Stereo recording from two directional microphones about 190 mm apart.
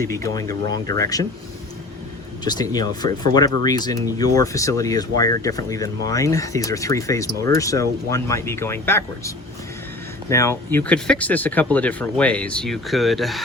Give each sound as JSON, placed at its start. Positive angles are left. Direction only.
{"t": 0.0, "sound": "speech", "side_deg": 15}
{"t": 2.4, "sound": "speech", "side_deg": 20}